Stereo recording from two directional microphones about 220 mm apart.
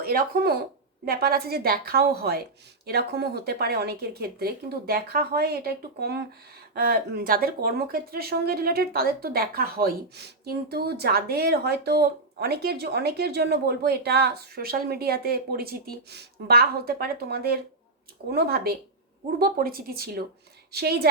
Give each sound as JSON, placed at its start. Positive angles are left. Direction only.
{"t": 0.0, "sound": "speech", "side_deg": -40}